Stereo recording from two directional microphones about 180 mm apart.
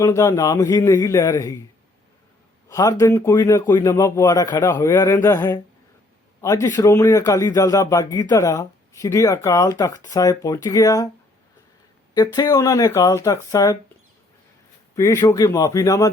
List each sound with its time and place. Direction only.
0.0 s a man's voice: 15° left (ahead or behind)
2.6 s a man's voice: 20° left (ahead or behind)
12.1 s speech: 20° left (ahead or behind)
14.9 s a man's voice: 15° left (ahead or behind)